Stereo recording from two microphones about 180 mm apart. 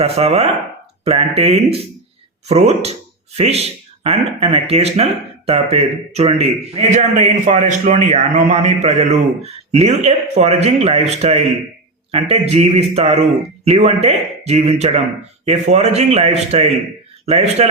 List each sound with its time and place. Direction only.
0.0 s a man's voice: 35° right (ahead or behind)